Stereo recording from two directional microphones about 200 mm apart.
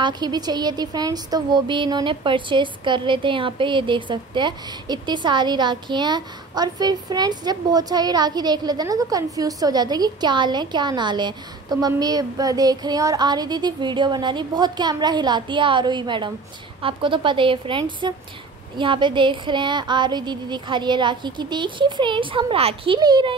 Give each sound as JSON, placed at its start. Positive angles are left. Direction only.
{"t": 0.0, "sound": "a woman's voice", "side_deg": -20}